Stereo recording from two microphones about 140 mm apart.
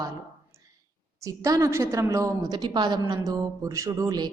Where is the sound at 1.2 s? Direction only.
25° right (ahead or behind).